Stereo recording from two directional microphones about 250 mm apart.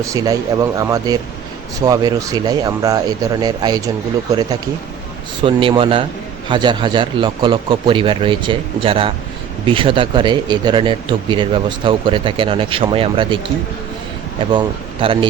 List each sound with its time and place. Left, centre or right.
0.0 s speech: centre
5.4 s speech: right
15.0 s speech: right